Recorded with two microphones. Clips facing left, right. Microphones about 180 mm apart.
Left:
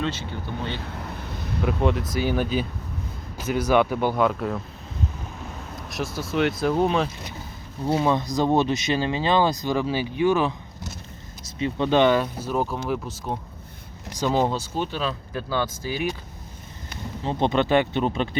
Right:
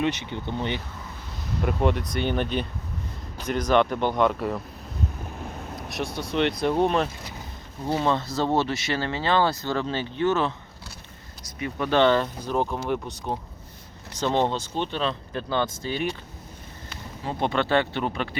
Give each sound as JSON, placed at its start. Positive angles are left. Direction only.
{"t": 0.0, "sound": "speech", "side_deg": -20}
{"t": 0.8, "sound": "vehicle", "side_deg": 65}
{"t": 1.6, "sound": "speech", "side_deg": 0}
{"t": 5.9, "sound": "speech", "side_deg": 0}
{"t": 7.9, "sound": "speech", "side_deg": 15}
{"t": 17.2, "sound": "speech", "side_deg": 20}